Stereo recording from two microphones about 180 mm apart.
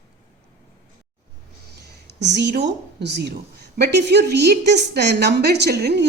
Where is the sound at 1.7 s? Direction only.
70° right (ahead or behind).